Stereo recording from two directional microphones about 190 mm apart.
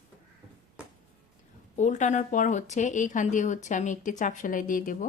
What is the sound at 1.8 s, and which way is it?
A woman's voice, 40° left (ahead or behind).